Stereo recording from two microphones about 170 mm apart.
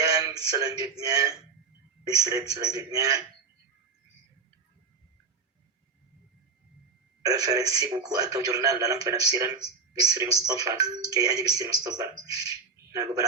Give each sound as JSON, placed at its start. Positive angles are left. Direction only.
{"t": 0.0, "sound": "speech", "side_deg": -20}
{"t": 7.2, "sound": "speech", "side_deg": -20}
{"t": 12.5, "sound": "a sound", "side_deg": -20}